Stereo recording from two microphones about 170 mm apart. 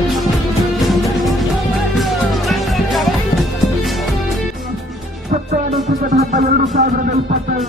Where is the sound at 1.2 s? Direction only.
Centre (ahead or behind).